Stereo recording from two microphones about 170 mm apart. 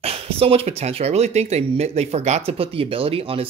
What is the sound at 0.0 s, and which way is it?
Speech, 35° right (ahead or behind).